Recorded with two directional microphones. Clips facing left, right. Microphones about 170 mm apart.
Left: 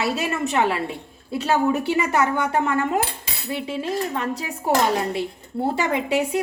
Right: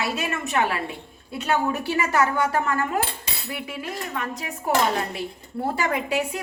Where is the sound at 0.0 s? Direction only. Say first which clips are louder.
Left 4 dB; 30° left (ahead or behind).